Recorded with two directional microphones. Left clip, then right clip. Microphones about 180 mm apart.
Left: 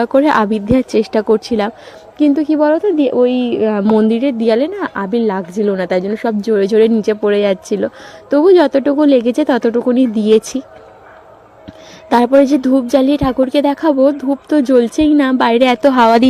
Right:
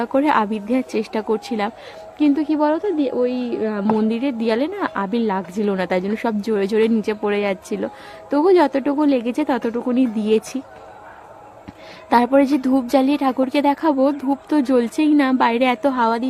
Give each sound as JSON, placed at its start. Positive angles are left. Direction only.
{"t": 0.0, "sound": "a woman's voice", "side_deg": 25}
{"t": 3.8, "sound": "a woman's voice", "side_deg": 25}
{"t": 12.0, "sound": "a woman's voice", "side_deg": 25}
{"t": 16.0, "sound": "a woman's voice", "side_deg": 50}